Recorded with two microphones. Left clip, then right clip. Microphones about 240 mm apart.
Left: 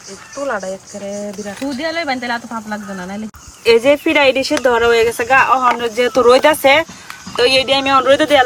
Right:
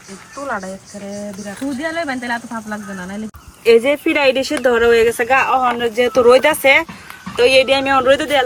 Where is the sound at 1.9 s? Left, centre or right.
Left.